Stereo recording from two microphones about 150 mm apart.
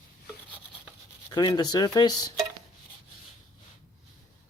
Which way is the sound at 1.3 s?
30° left (ahead or behind).